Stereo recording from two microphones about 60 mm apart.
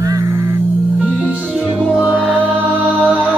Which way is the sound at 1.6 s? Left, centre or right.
Centre.